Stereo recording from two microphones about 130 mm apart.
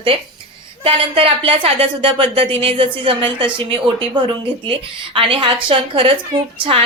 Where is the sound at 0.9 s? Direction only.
45° right (ahead or behind).